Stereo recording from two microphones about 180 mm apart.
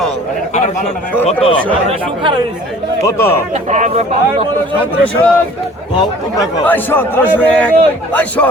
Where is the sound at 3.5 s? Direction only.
40° right (ahead or behind).